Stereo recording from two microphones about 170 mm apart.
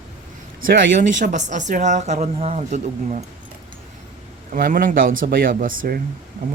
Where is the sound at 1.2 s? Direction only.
45° right (ahead or behind).